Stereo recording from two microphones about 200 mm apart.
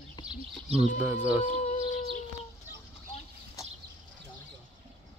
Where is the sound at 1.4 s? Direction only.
35° left (ahead or behind).